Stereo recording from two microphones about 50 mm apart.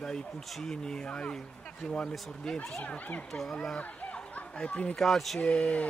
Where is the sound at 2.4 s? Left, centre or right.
Centre.